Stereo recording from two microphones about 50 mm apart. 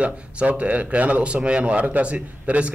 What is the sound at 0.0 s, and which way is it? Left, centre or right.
Speech, right.